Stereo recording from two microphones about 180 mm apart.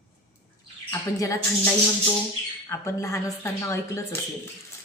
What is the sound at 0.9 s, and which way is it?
Speech, 15° left (ahead or behind).